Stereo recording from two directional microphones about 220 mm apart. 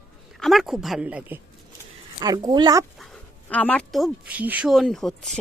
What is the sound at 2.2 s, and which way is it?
Speech, 15° right (ahead or behind).